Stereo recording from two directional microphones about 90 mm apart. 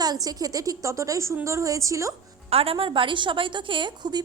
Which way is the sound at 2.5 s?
90° right.